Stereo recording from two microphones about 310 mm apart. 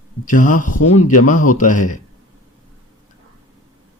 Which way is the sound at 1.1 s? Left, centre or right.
Left.